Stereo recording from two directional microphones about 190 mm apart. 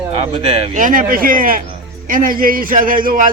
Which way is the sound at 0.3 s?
30° right (ahead or behind).